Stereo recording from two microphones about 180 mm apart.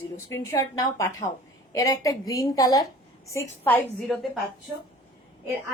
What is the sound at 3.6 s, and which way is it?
Speech, 5° left (ahead or behind).